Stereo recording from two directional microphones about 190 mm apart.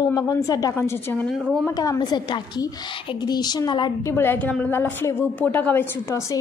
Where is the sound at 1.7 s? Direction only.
20° left (ahead or behind).